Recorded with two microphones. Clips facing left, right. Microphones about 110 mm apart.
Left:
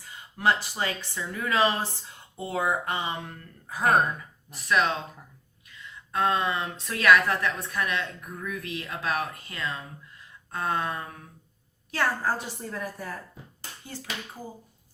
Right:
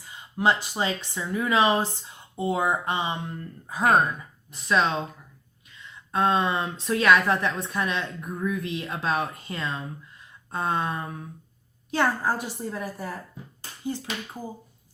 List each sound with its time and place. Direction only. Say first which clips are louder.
0.0 s speech: right 2 dB; 20° right (ahead or behind)
6.1 s a woman's voice: right 3 dB; 25° right (ahead or behind)